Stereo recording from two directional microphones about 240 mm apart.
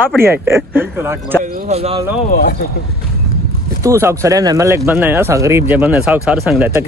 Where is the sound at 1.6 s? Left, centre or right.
Right.